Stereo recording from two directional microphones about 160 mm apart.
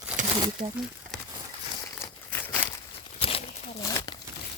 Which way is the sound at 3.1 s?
40° left (ahead or behind).